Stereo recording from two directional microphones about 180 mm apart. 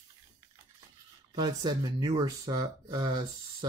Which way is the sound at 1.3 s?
25° right (ahead or behind).